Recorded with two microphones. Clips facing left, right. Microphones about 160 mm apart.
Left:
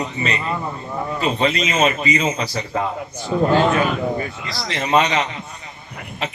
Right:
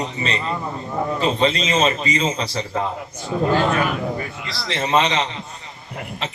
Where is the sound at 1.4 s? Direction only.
30° right (ahead or behind).